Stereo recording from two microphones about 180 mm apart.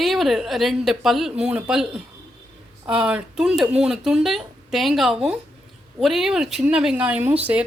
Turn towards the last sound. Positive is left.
turn(degrees=-10)  # may be behind; listen again after turning